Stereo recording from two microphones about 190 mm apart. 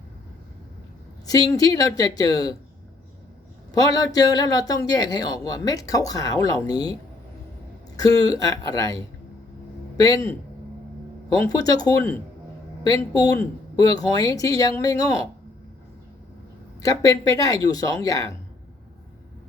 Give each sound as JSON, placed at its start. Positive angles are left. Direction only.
{"t": 1.3, "sound": "a man's voice", "side_deg": 20}
{"t": 3.8, "sound": "a man's voice", "side_deg": 20}
{"t": 7.9, "sound": "a man's voice", "side_deg": 20}
{"t": 10.0, "sound": "a man's voice", "side_deg": 15}
{"t": 11.5, "sound": "a man's voice", "side_deg": 20}
{"t": 16.8, "sound": "a man's voice", "side_deg": 20}